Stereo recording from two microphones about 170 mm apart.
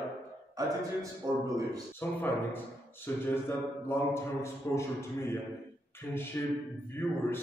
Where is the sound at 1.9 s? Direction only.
10° left (ahead or behind).